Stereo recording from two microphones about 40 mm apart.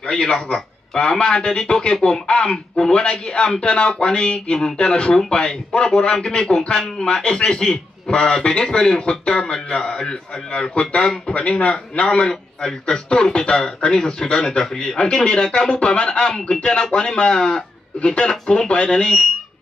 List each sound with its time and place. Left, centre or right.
0.1 s a man's voice: left
10.7 s a man's voice: left